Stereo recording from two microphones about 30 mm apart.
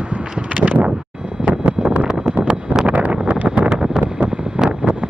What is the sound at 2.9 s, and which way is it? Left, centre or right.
Wind noise, right.